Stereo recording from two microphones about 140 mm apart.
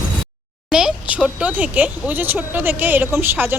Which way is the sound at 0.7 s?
5° right (ahead or behind).